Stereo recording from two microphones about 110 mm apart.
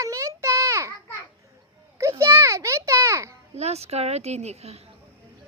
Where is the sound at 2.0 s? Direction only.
25° right (ahead or behind).